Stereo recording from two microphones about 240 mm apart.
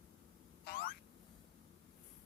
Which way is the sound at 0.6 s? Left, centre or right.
Left.